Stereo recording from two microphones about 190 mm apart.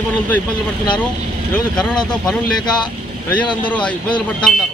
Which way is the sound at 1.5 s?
5° left (ahead or behind).